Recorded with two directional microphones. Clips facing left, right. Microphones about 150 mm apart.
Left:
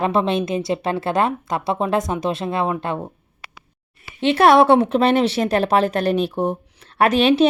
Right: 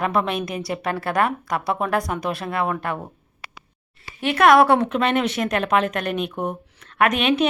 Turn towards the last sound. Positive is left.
turn(degrees=30)  # may be behind; listen again after turning